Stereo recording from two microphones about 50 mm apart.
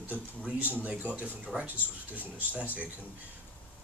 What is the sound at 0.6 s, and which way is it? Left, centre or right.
Speech, right.